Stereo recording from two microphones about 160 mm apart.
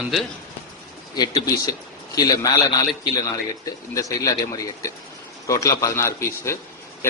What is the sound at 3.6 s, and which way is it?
A man's voice, 20° left (ahead or behind).